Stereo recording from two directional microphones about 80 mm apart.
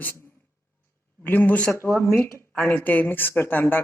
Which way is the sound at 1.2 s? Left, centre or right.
Left.